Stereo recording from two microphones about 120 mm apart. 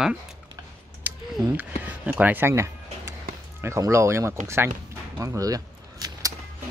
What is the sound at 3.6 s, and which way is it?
Speech, 25° right (ahead or behind).